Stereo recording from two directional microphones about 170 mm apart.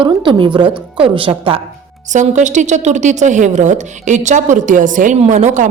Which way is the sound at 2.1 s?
45° right (ahead or behind).